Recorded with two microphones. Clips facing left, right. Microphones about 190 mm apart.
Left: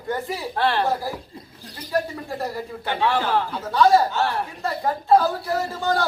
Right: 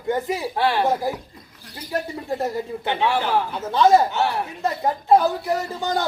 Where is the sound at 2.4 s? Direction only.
20° right (ahead or behind).